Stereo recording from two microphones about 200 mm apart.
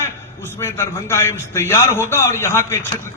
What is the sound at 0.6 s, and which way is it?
A man's voice, 10° left (ahead or behind).